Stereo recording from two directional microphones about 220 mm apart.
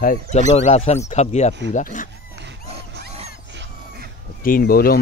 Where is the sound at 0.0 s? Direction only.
35° left (ahead or behind).